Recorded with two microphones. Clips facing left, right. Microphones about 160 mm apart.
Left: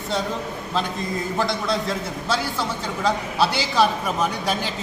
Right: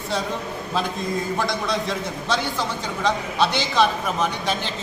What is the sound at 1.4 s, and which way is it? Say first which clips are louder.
A man's voice: left 1 dB; centre (ahead or behind).